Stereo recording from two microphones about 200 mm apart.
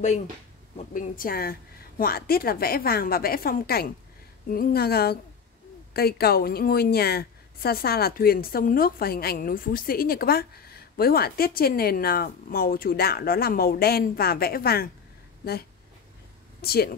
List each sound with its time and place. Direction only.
0.9 s a woman's voice: 45° left (ahead or behind)
16.6 s a woman's voice: 50° left (ahead or behind)